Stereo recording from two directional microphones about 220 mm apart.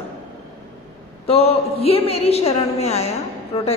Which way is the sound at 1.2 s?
25° left (ahead or behind).